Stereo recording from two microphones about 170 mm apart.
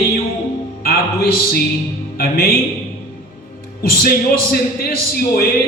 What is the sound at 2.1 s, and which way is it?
Speech, 60° left (ahead or behind).